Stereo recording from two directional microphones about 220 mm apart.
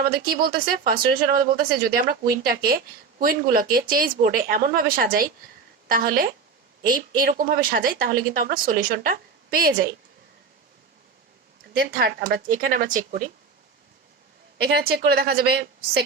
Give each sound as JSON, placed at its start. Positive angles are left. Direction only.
{"t": 0.3, "sound": "speech", "side_deg": -45}
{"t": 11.8, "sound": "speech", "side_deg": -45}
{"t": 14.6, "sound": "a woman's voice", "side_deg": -45}